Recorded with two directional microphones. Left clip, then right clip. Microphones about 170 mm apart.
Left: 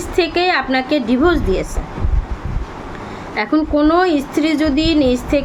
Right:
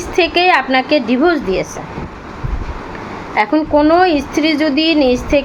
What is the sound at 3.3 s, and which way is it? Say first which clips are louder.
A woman's voice: right 4 dB; 20° left (ahead or behind).